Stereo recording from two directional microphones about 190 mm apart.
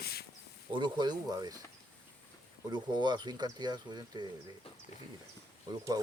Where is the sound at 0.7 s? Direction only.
25° right (ahead or behind).